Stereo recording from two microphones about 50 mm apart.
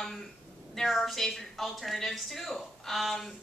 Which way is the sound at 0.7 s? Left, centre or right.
Centre.